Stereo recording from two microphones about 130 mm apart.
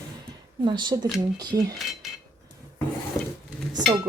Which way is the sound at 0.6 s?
35° right (ahead or behind).